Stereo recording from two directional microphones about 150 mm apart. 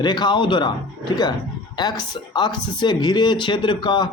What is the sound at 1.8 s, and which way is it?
Speech, 30° left (ahead or behind).